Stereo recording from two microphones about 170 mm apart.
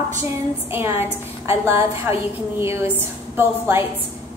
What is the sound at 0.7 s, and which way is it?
A woman's voice, 15° right (ahead or behind).